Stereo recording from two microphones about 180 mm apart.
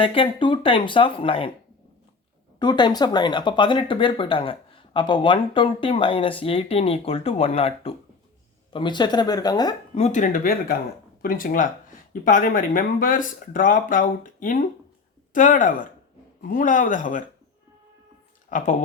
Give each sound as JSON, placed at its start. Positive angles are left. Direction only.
{"t": 0.0, "sound": "speech", "side_deg": 30}
{"t": 2.6, "sound": "speech", "side_deg": 25}
{"t": 9.9, "sound": "speech", "side_deg": 40}
{"t": 18.4, "sound": "speech", "side_deg": 45}